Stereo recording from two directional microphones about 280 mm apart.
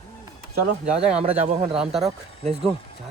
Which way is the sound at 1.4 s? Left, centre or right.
Right.